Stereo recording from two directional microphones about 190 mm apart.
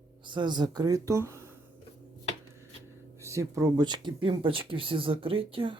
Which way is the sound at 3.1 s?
15° right (ahead or behind).